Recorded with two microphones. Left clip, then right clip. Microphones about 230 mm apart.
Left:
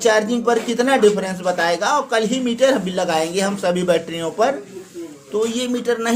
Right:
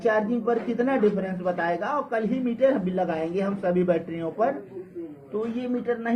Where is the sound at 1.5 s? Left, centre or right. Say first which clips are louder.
Left 9 dB; left.